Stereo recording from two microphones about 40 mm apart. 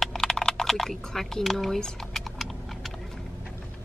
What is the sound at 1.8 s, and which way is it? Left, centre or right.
Typing, centre.